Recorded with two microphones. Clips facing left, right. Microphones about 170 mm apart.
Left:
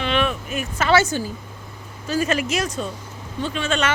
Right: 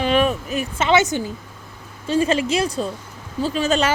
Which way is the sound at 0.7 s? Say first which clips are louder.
Even; 20° right (ahead or behind).